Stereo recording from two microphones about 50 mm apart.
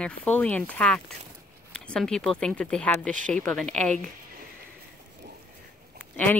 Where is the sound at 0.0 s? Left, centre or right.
Left.